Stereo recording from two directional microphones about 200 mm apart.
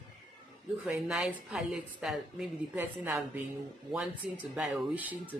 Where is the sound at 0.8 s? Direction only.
5° right (ahead or behind).